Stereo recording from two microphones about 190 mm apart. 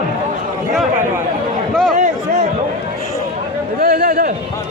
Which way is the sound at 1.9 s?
40° right (ahead or behind).